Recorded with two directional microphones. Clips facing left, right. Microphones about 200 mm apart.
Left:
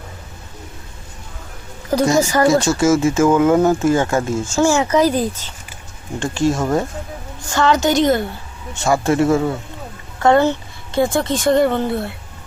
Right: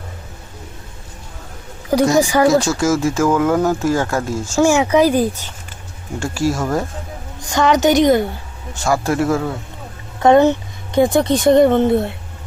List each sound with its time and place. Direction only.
2.1 s speech: 15° right (ahead or behind)
2.5 s speech: centre (ahead or behind)
4.5 s speech: 15° right (ahead or behind); by 6.8 s centre (ahead or behind)
7.5 s speech: 15° right (ahead or behind)
8.8 s speech: centre (ahead or behind)
10.2 s speech: 20° right (ahead or behind)